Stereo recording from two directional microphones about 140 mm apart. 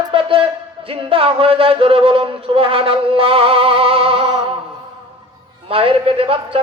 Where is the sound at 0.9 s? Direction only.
40° right (ahead or behind).